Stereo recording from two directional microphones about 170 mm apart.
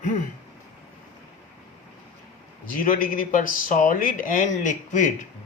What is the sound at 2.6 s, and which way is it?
Speech, 55° left (ahead or behind).